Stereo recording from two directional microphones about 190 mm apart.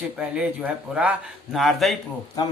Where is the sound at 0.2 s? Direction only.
5° right (ahead or behind).